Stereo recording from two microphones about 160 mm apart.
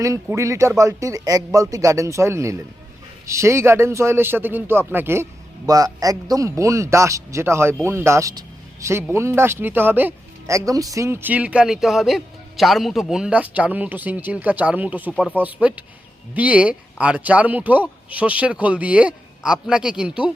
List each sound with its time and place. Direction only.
0.0 s a man's voice: 20° right (ahead or behind)
15.1 s speech: 5° left (ahead or behind)
15.4 s a man's voice: 10° right (ahead or behind)